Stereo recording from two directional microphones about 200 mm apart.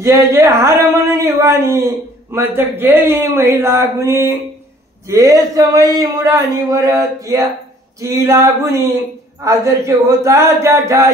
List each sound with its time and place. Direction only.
0.0 s speech: 15° right (ahead or behind)